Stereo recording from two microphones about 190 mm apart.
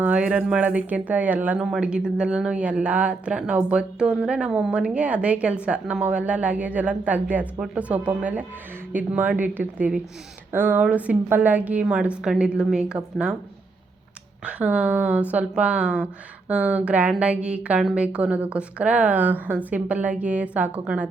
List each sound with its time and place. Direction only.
0.0 s speech: 5° right (ahead or behind)
14.4 s speech: 5° right (ahead or behind)